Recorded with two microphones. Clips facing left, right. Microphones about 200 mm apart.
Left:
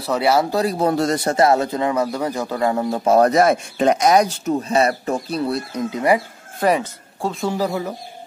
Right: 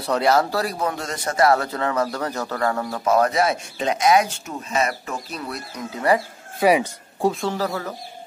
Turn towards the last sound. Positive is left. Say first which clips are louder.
# left 3 dB
turn(degrees=15)  # may be behind; listen again after turning